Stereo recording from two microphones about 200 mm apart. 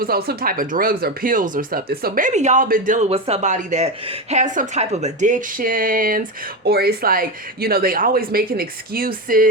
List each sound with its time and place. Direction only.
0.0 s speech: 50° right (ahead or behind)